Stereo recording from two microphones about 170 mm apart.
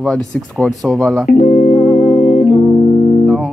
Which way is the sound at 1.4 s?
35° left (ahead or behind).